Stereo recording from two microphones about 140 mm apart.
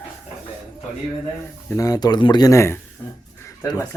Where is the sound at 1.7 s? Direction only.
25° left (ahead or behind).